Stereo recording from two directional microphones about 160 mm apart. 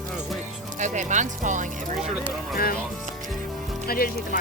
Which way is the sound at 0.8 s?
50° right (ahead or behind).